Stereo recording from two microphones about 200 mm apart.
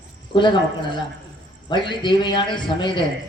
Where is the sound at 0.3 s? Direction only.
25° left (ahead or behind).